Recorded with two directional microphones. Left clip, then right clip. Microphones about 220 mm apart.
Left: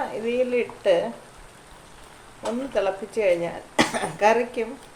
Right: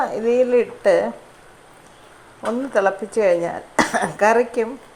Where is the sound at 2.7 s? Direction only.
20° right (ahead or behind).